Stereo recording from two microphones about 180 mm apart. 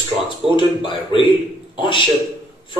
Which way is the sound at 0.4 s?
Centre (ahead or behind).